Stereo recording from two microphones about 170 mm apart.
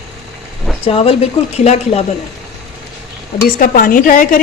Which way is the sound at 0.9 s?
35° left (ahead or behind).